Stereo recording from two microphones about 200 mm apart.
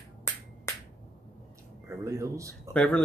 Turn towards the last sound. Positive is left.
turn(degrees=5)  # may be behind; listen again after turning